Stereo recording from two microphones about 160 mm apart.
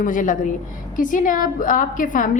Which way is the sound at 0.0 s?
55° left (ahead or behind).